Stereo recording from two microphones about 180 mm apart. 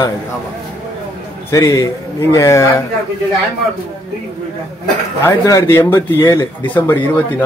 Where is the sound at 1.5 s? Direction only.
15° left (ahead or behind).